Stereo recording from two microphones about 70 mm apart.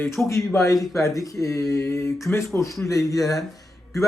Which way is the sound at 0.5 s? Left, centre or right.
Left.